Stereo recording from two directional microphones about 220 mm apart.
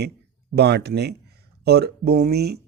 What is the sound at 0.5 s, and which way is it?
Speech, 50° right (ahead or behind).